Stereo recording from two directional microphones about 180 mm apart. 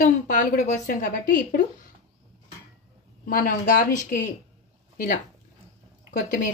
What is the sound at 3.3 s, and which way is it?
Speech, 50° left (ahead or behind).